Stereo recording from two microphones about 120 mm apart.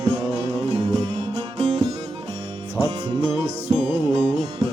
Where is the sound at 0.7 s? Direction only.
50° right (ahead or behind).